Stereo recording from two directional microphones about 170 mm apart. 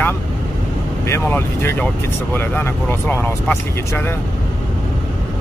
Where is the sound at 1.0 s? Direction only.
15° left (ahead or behind).